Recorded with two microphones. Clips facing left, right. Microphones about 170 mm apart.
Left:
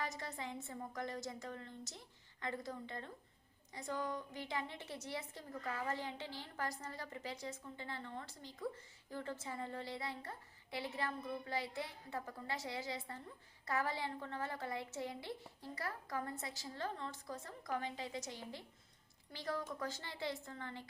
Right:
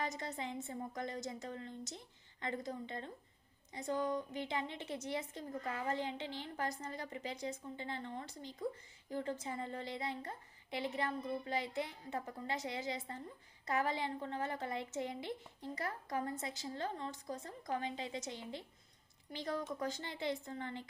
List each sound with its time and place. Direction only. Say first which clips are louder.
0.0 s a woman's voice: right 3 dB; 20° right (ahead or behind)